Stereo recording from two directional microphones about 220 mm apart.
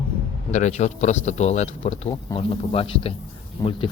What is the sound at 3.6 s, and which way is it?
Speech, 15° left (ahead or behind).